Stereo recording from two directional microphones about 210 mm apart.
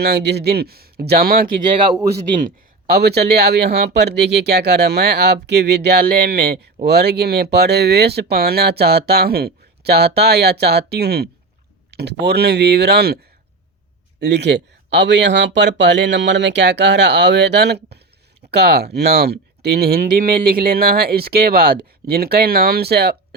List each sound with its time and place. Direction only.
0.0 s speech: 50° right (ahead or behind)
2.3 s a man's voice: 25° right (ahead or behind)
2.9 s speech: 50° right (ahead or behind)
14.2 s speech: 55° right (ahead or behind)